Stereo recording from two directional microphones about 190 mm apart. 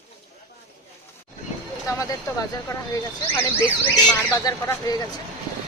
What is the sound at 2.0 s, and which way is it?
Speech, 15° left (ahead or behind).